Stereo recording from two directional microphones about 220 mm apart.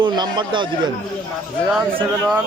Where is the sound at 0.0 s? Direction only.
20° right (ahead or behind).